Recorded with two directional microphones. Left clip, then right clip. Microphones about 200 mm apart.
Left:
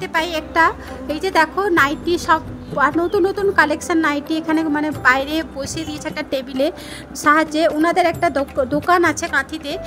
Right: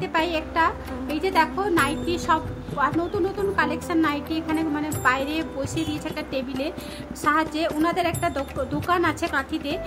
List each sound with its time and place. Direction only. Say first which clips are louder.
0.0 s a woman's voice: left 3 dB; 35° left (ahead or behind)